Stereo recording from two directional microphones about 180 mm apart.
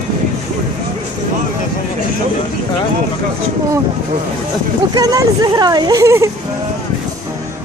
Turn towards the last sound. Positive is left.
turn(degrees=-15)  # may be behind; listen again after turning